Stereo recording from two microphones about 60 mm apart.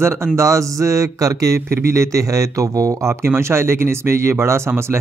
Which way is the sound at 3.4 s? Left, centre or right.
Right.